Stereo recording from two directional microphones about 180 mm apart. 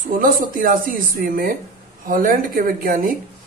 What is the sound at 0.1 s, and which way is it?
Speech, 50° right (ahead or behind).